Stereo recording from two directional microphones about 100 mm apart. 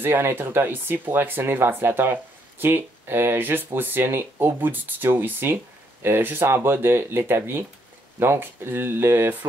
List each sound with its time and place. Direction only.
0.0 s speech: 25° right (ahead or behind)